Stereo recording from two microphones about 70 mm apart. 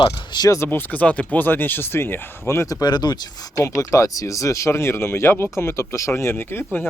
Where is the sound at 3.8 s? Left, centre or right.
Left.